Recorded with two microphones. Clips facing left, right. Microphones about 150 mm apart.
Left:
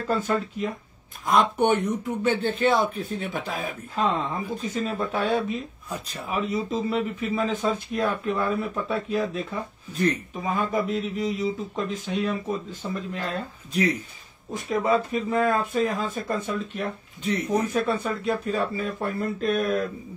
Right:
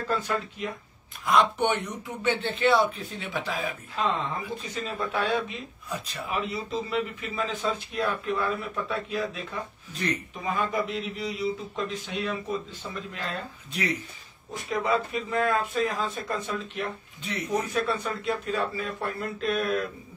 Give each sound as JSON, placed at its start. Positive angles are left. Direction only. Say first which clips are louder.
{"t": 0.1, "sound": "speech", "louder": "left 5 dB", "side_deg": 45}